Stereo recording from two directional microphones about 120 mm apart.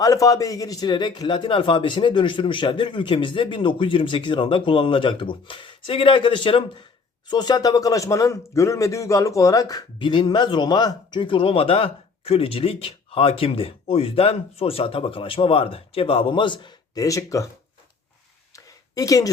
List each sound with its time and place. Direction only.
0.0 s a man's voice: 30° left (ahead or behind); by 6.8 s 45° left (ahead or behind)
7.3 s a man's voice: 35° left (ahead or behind)
18.5 s a sound: 30° left (ahead or behind)